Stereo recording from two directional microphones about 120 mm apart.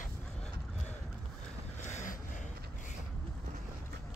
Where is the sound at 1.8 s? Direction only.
80° left.